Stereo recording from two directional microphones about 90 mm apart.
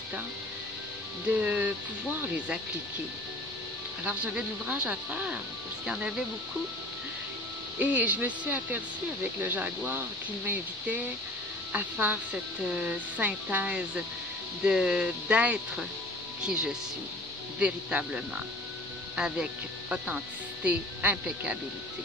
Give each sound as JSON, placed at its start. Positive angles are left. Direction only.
{"t": 1.3, "sound": "speech", "side_deg": -15}
{"t": 4.0, "sound": "speech", "side_deg": -15}
{"t": 7.8, "sound": "speech", "side_deg": -20}